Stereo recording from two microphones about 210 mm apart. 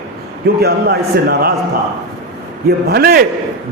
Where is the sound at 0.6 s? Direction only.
50° right (ahead or behind).